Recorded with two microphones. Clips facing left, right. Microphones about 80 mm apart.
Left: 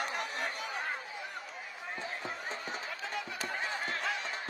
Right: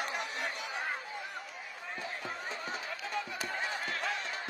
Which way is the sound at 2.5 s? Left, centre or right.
Left.